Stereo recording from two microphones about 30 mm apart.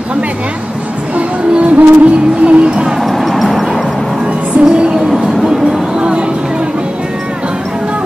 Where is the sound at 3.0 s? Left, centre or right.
Centre.